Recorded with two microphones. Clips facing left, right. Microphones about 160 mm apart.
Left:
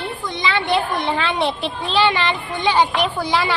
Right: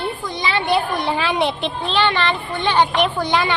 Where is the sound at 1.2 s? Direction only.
Centre (ahead or behind).